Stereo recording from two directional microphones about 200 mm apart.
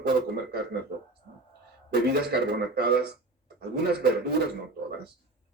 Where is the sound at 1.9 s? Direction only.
55° right (ahead or behind).